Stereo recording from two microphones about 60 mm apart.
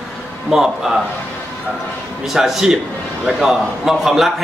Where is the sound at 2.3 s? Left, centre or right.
Centre.